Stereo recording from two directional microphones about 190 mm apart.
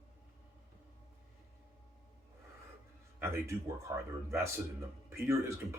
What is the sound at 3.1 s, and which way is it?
Speech, 15° right (ahead or behind).